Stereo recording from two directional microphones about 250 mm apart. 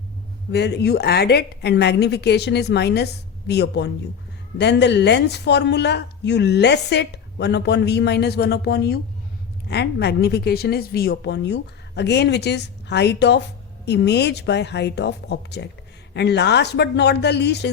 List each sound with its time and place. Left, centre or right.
0.5 s a woman's voice: left